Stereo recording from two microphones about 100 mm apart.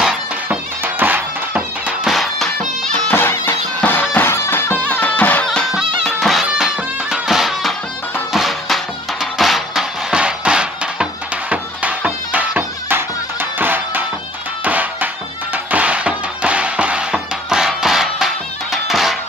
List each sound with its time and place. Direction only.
0.8 s music: 20° right (ahead or behind)
2.0 s music: centre (ahead or behind)
3.1 s music: 25° left (ahead or behind); by 19.1 s centre (ahead or behind)